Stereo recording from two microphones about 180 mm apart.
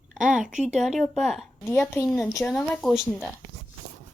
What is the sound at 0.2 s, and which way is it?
Speech, 45° right (ahead or behind).